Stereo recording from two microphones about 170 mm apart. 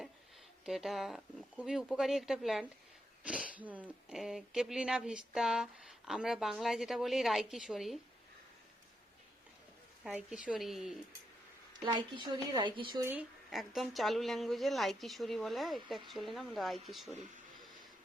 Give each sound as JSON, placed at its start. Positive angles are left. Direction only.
{"t": 0.6, "sound": "speech", "side_deg": 0}
{"t": 10.0, "sound": "speech", "side_deg": -5}
{"t": 11.9, "sound": "speech", "side_deg": -25}
{"t": 13.0, "sound": "speech", "side_deg": -10}
{"t": 13.5, "sound": "speech", "side_deg": 0}